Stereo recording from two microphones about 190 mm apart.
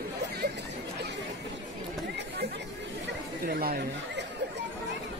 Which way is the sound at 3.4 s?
50° right (ahead or behind).